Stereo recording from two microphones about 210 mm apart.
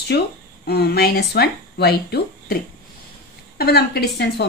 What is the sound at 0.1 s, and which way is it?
Speech, 50° left (ahead or behind).